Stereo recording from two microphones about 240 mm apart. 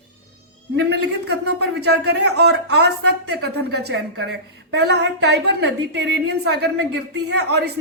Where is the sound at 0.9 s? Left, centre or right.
Right.